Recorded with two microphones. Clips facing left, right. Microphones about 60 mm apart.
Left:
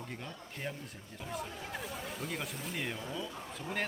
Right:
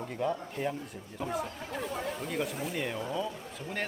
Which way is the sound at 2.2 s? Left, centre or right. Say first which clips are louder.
Right 6 dB; centre.